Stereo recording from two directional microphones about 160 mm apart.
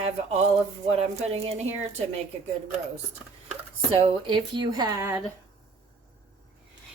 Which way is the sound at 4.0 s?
30° right (ahead or behind).